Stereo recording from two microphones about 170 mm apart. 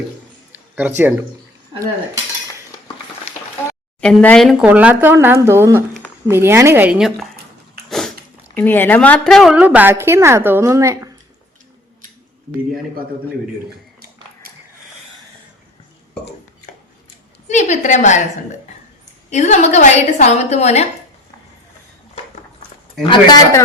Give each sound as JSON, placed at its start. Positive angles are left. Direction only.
{"t": 0.5, "sound": "a sound", "side_deg": -10}
{"t": 3.3, "sound": "a sound", "side_deg": 40}
{"t": 4.0, "sound": "speech", "side_deg": 5}
{"t": 4.6, "sound": "a woman's voice", "side_deg": -10}
{"t": 7.9, "sound": "biting", "side_deg": 0}
{"t": 8.5, "sound": "a woman's voice", "side_deg": 10}
{"t": 17.5, "sound": "a woman's voice", "side_deg": 45}
{"t": 19.3, "sound": "a woman's voice", "side_deg": 45}
{"t": 23.0, "sound": "a man's voice", "side_deg": 25}